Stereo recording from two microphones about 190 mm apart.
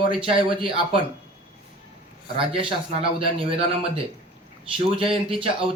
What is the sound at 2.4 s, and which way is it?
A man's voice, 30° right (ahead or behind).